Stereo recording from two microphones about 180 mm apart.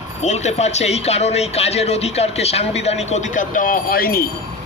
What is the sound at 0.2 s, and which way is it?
Speech, 40° left (ahead or behind).